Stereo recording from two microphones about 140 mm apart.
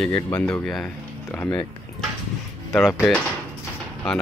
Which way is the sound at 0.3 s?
5° left (ahead or behind).